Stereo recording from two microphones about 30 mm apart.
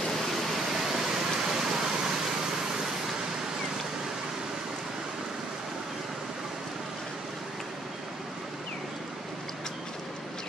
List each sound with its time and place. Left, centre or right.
0.7 s vehicle: centre